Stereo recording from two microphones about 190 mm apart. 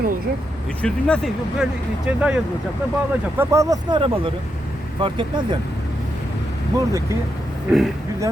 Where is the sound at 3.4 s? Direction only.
15° right (ahead or behind).